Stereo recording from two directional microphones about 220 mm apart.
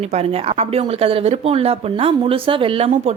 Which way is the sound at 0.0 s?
30° right (ahead or behind).